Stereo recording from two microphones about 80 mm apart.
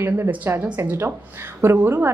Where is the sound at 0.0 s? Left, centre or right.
Right.